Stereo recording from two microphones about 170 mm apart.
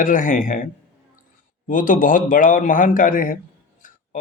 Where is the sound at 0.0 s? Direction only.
50° left (ahead or behind).